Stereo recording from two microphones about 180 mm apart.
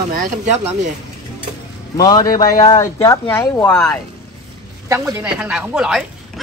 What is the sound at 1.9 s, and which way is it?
Speech, 25° left (ahead or behind).